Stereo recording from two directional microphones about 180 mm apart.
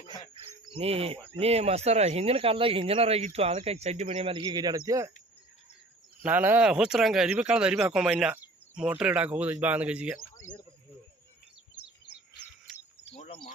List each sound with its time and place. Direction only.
0.3 s speech: 30° right (ahead or behind)
6.2 s speech: 10° right (ahead or behind)
12.7 s cricket: 35° left (ahead or behind)